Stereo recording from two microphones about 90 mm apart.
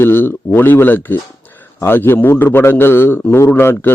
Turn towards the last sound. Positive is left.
turn(degrees=25)  # may be behind; listen again after turning